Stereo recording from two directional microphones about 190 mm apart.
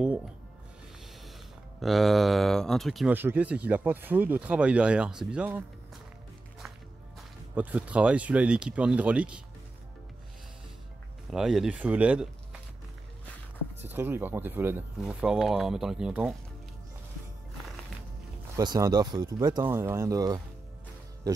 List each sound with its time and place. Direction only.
1.8 s speech: centre (ahead or behind)
7.5 s speech: 5° right (ahead or behind)
11.3 s speech: centre (ahead or behind)
13.9 s speech: 10° right (ahead or behind)
18.6 s speech: 20° right (ahead or behind)